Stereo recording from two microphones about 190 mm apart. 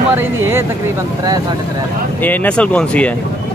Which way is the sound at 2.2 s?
10° left (ahead or behind).